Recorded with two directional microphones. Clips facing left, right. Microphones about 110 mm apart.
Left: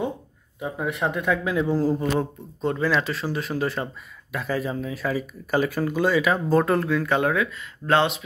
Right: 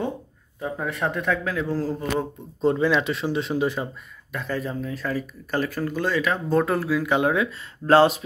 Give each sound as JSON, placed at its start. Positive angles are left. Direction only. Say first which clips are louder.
{"t": 0.6, "sound": "speech", "louder": "left 1 dB", "side_deg": 15}
{"t": 2.6, "sound": "speech", "louder": "right 3 dB", "side_deg": -20}
{"t": 4.3, "sound": "speech", "louder": "left 2 dB", "side_deg": 5}
{"t": 7.5, "sound": "speech", "louder": "right 4 dB", "side_deg": -35}